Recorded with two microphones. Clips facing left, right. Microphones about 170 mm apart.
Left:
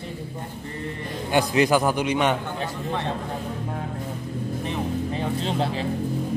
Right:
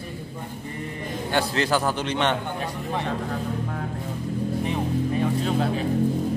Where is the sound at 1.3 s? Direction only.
15° left (ahead or behind).